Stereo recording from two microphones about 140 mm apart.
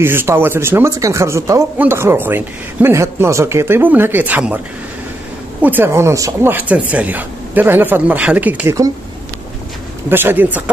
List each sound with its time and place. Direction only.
0.0 s speech: 15° right (ahead or behind)
5.6 s speech: 15° right (ahead or behind)
10.0 s speech: 15° right (ahead or behind)